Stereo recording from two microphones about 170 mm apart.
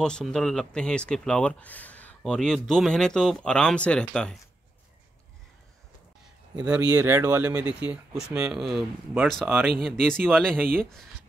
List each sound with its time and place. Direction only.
0.0 s speech: 5° left (ahead or behind)
6.6 s speech: 5° right (ahead or behind)
10.6 s speech: 10° right (ahead or behind)